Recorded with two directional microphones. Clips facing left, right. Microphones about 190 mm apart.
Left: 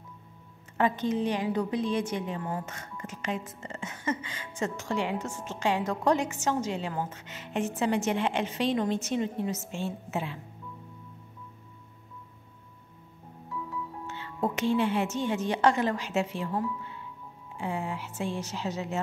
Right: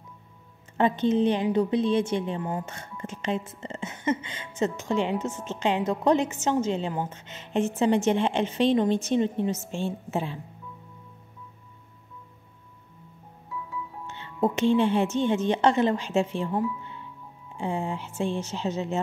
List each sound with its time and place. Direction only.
0.7 s a woman's voice: 25° right (ahead or behind)
14.0 s a woman's voice: 25° right (ahead or behind)